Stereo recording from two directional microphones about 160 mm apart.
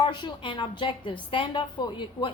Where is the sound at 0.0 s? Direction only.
30° left (ahead or behind).